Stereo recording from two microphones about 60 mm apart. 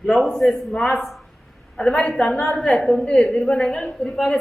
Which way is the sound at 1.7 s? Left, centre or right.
Centre.